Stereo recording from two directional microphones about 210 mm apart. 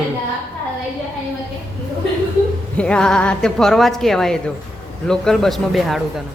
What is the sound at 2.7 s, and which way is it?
A woman's voice, 5° left (ahead or behind).